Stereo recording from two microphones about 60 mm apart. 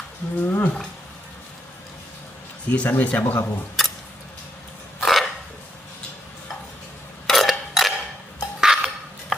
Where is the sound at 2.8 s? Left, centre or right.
Left.